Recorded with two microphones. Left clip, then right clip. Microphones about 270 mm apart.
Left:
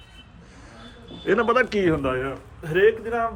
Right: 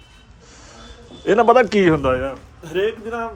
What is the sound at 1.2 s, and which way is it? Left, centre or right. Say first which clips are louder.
Speech: right 7 dB; centre.